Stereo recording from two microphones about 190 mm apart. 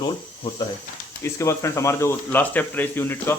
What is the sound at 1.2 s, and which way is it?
Speech, 15° left (ahead or behind).